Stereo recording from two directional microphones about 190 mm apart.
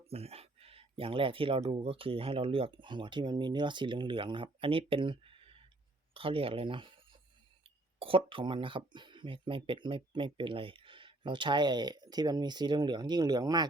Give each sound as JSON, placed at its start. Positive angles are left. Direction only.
{"t": 0.1, "sound": "speech", "side_deg": -30}
{"t": 7.9, "sound": "speech", "side_deg": -30}